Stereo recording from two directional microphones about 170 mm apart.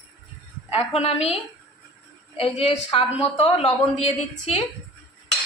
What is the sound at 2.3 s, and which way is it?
A woman's voice, 35° left (ahead or behind).